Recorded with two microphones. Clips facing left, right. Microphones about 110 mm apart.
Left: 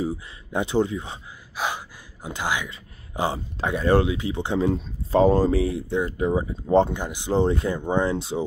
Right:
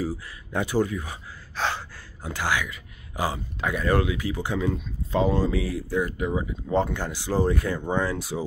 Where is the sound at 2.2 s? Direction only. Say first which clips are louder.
Even; 20° left (ahead or behind).